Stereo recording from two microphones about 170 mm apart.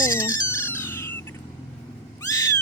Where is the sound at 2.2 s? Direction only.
20° left (ahead or behind).